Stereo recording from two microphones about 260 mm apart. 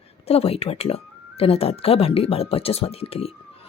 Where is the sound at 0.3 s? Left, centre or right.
Left.